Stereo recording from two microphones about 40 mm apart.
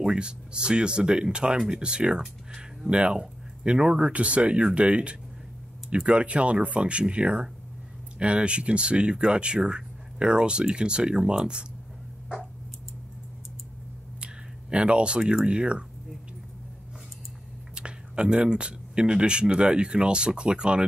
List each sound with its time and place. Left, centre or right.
0.0 s speech: right
4.1 s speech: right
14.2 s a sound: right
15.4 s speech: right
17.7 s speech: right